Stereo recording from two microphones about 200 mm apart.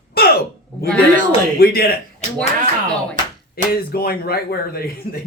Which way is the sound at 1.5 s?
50° left (ahead or behind).